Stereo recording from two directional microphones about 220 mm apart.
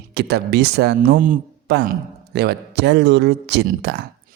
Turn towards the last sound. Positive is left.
turn(degrees=-50)  # may be behind; listen again after turning